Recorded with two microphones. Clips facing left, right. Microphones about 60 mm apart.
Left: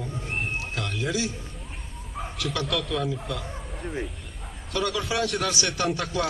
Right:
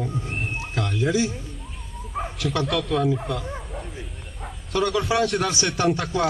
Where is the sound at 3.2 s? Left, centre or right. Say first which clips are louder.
Right 4 dB; centre.